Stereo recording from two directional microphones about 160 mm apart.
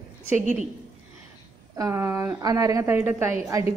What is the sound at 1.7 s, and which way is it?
A woman's voice, 20° right (ahead or behind).